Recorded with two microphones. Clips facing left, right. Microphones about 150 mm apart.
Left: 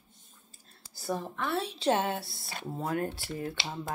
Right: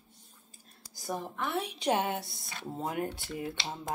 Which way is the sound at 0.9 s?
15° right (ahead or behind).